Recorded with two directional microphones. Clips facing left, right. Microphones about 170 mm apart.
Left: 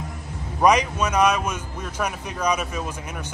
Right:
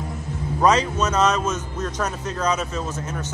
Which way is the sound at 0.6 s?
15° left (ahead or behind).